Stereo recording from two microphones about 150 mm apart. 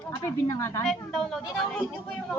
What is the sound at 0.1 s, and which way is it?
Speech, 20° left (ahead or behind).